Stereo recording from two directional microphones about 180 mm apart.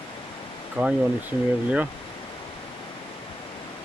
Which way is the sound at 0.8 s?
5° right (ahead or behind).